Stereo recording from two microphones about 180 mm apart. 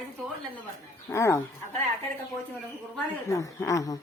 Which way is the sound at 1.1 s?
15° left (ahead or behind).